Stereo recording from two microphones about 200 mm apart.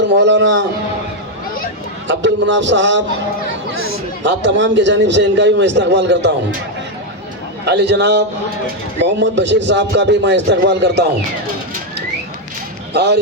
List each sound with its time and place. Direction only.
0.2 s a man's voice: 65° right (ahead or behind)
2.0 s a man's voice: 65° right (ahead or behind)
4.2 s a man's voice: 65° right (ahead or behind)
7.6 s a man's voice: 60° right (ahead or behind)
12.9 s speech: 55° right (ahead or behind)